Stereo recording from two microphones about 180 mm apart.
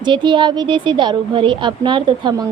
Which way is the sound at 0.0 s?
25° right (ahead or behind).